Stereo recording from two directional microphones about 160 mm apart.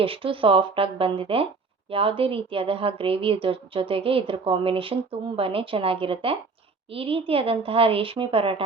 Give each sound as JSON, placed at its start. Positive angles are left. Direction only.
{"t": 0.0, "sound": "a woman's voice", "side_deg": -35}